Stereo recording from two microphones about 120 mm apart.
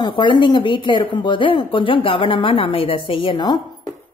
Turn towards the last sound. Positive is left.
turn(degrees=40)  # may be behind; listen again after turning